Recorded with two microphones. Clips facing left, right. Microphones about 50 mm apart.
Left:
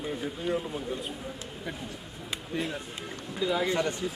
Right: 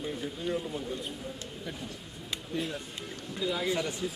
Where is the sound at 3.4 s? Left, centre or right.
Centre.